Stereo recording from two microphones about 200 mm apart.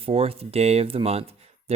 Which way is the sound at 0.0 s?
30° right (ahead or behind).